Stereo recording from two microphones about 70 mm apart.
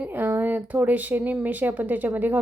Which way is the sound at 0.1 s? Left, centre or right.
Right.